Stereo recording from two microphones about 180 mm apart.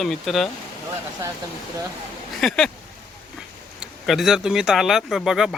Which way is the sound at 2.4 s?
5° left (ahead or behind).